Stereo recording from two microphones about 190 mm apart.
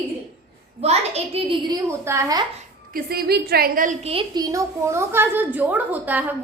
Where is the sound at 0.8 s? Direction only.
35° right (ahead or behind).